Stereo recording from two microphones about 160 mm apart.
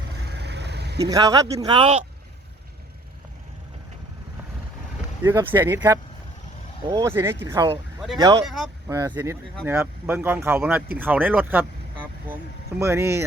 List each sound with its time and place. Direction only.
0.3 s vehicle: 90° right
1.0 s speech: 25° right (ahead or behind)
1.6 s speech: 35° right (ahead or behind)
5.2 s speech: 15° right (ahead or behind)
7.1 s speech: 15° right (ahead or behind)
8.9 s speech: 20° right (ahead or behind)
12.8 s speech: 15° right (ahead or behind)